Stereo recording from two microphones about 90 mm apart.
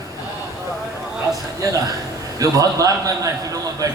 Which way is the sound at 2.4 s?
40° right (ahead or behind).